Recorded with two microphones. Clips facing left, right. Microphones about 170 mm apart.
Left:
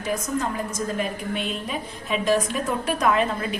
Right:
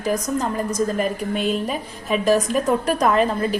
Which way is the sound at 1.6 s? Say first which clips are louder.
Right 4 dB; 40° right (ahead or behind).